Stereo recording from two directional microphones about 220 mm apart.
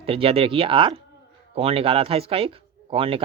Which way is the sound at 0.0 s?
25° right (ahead or behind).